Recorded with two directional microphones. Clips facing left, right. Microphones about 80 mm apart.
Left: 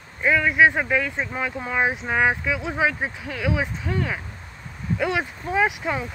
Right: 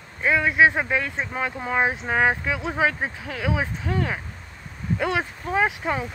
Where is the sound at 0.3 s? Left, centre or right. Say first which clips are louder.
Left 1 dB; centre.